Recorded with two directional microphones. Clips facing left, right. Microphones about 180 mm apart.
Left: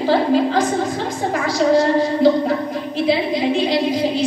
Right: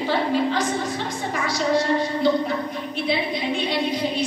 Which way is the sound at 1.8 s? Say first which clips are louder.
Left 6 dB; 90° left.